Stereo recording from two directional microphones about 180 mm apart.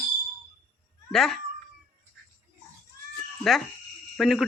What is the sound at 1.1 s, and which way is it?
Speech, centre (ahead or behind).